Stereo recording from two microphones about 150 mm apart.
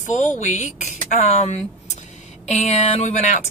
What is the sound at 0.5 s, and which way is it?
Speech, 55° left (ahead or behind).